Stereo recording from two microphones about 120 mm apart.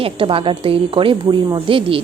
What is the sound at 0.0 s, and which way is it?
A woman's voice, 50° right (ahead or behind).